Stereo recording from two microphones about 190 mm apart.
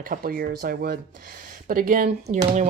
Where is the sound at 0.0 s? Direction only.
50° right (ahead or behind).